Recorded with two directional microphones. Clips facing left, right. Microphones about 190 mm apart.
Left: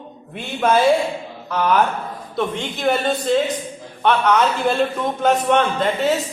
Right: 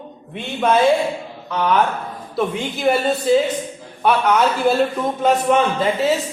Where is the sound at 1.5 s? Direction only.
Centre (ahead or behind).